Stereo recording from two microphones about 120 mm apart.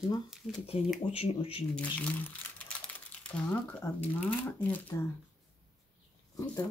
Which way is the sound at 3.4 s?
20° left (ahead or behind).